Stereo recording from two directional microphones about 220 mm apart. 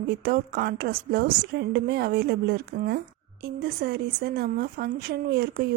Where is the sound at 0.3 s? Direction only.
45° right (ahead or behind).